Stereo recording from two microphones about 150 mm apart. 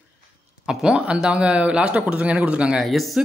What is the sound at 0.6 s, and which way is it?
A man's voice, 5° right (ahead or behind).